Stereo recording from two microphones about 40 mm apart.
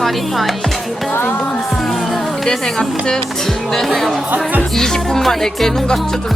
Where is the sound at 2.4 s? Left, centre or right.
Centre.